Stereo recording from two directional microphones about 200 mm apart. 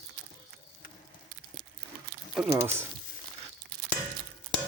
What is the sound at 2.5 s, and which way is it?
Speech, 10° right (ahead or behind).